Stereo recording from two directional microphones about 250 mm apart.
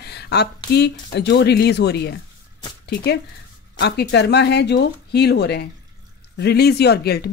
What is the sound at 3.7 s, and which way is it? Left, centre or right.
Speech, left.